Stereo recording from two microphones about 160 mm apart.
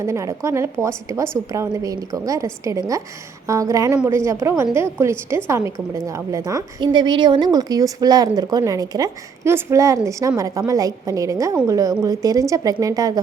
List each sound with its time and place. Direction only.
0.0 s a woman's voice: 20° right (ahead or behind)